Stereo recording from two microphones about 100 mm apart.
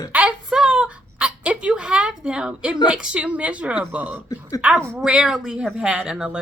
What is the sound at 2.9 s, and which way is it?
Speech, 10° right (ahead or behind).